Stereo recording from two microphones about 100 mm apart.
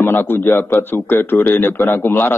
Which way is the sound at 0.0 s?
20° left (ahead or behind).